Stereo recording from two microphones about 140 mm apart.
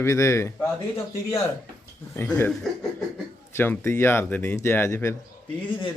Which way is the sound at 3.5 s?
15° left (ahead or behind).